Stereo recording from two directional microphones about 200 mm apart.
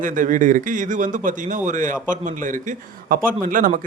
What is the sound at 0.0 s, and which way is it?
A man's voice, 40° right (ahead or behind).